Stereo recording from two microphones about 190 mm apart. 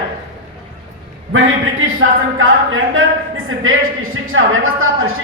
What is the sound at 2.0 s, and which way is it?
A woman's voice, 90° right.